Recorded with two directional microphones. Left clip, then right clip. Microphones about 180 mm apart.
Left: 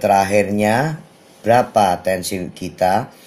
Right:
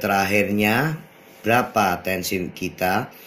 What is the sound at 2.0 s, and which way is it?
Speech, 20° left (ahead or behind).